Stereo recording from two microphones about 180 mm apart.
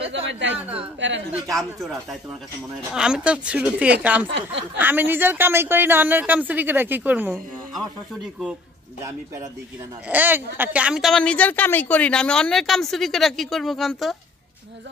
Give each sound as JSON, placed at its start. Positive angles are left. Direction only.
{"t": 0.1, "sound": "a woman's voice", "side_deg": -90}
{"t": 1.5, "sound": "a woman's voice", "side_deg": 0}
{"t": 4.3, "sound": "speech", "side_deg": -80}
{"t": 4.7, "sound": "speech", "side_deg": -10}
{"t": 10.0, "sound": "a woman's voice", "side_deg": -10}